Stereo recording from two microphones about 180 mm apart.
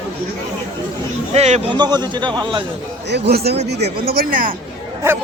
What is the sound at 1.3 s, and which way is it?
Speech, 35° right (ahead or behind).